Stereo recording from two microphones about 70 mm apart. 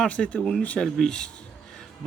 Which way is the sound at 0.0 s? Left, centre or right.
Centre.